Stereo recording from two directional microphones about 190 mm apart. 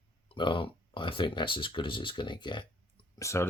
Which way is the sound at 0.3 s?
25° left (ahead or behind).